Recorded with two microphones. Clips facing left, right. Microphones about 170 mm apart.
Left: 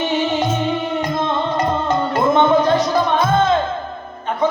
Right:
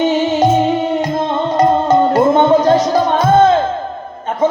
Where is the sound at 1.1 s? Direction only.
40° right (ahead or behind).